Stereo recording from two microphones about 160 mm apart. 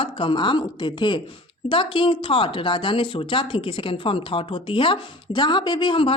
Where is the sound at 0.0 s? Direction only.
30° left (ahead or behind).